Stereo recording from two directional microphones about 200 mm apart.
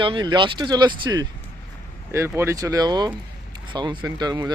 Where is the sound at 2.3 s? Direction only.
15° right (ahead or behind).